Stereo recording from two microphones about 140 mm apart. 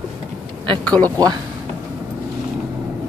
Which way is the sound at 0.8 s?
10° left (ahead or behind).